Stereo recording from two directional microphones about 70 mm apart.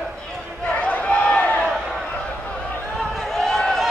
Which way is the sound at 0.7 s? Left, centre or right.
Left.